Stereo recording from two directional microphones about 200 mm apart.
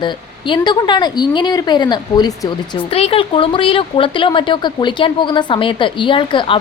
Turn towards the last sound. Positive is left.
turn(degrees=25)  # may be behind; listen again after turning